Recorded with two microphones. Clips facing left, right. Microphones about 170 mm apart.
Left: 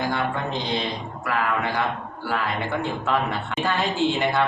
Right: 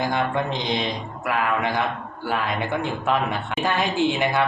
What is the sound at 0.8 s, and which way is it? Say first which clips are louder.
Speech: right 1 dB; 15° right (ahead or behind).